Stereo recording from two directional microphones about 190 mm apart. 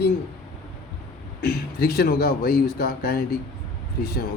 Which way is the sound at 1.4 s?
55° left (ahead or behind).